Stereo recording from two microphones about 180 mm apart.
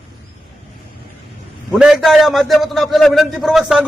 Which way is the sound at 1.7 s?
5° right (ahead or behind).